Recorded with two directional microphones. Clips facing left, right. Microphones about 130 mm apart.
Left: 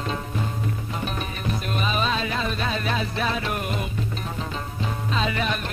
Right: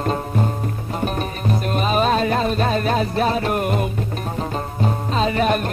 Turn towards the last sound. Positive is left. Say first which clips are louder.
# right 7 dB
turn(degrees=-45)  # may be behind; listen again after turning